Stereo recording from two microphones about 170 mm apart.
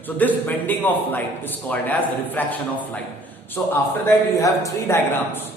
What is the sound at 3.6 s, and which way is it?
A man's voice, 10° left (ahead or behind).